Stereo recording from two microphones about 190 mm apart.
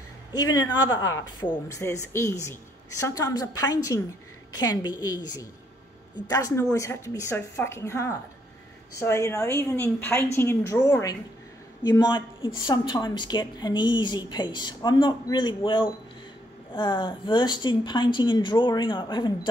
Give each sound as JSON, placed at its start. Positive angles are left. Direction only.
{"t": 0.3, "sound": "speech", "side_deg": 20}